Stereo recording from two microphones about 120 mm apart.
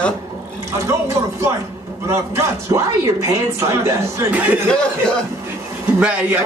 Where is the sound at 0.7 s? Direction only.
25° right (ahead or behind).